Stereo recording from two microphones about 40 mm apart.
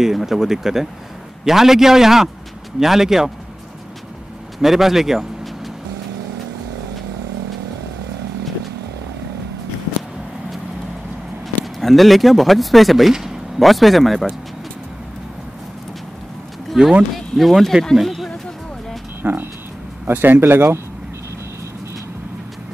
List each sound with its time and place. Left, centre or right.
0.0 s speech: centre
4.6 s speech: centre
11.8 s speech: centre
13.1 s a sound: centre
13.6 s speech: centre
16.8 s speech: centre
17.4 s speech: centre
19.2 s speech: right
20.1 s a man's voice: right